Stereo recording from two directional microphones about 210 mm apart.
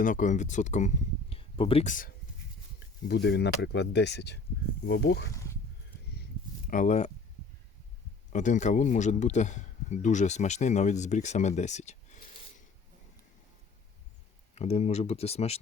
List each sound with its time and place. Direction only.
0.0 s speech: 40° left (ahead or behind)
3.1 s speech: 55° left (ahead or behind)
6.7 s speech: 35° left (ahead or behind)
8.3 s a man's voice: 35° left (ahead or behind)
14.5 s speech: 30° left (ahead or behind)